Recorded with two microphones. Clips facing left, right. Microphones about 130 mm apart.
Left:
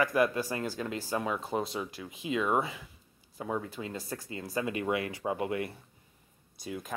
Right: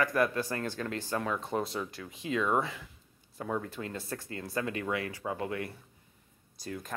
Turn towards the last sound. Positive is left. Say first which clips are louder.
# left 1 dB
turn(degrees=0)  # may be behind; listen again after turning